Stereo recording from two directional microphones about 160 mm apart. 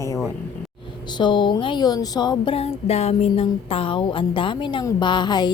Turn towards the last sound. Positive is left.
turn(degrees=25)  # may be behind; listen again after turning